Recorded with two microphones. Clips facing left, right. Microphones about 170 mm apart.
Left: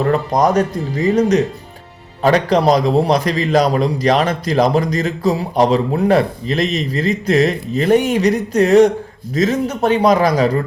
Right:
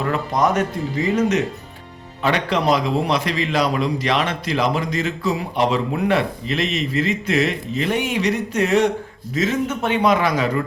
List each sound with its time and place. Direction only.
0.0 s a man's voice: 40° left (ahead or behind)